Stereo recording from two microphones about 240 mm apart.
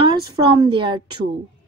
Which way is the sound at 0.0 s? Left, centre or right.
Centre.